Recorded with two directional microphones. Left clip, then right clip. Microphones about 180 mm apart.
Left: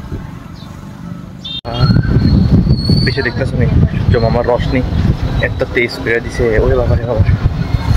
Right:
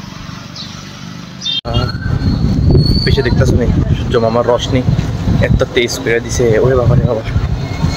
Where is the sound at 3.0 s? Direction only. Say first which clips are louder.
Right 2 dB; 15° right (ahead or behind).